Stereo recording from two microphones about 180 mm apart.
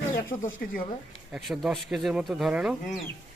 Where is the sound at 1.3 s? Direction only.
5° right (ahead or behind).